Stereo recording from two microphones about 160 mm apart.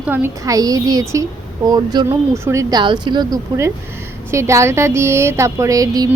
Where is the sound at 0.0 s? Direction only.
15° right (ahead or behind).